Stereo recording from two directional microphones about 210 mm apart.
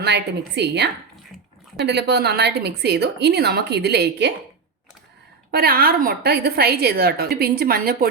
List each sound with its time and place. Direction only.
0.0 s a woman's voice: 55° right (ahead or behind)
5.5 s a woman's voice: 45° right (ahead or behind)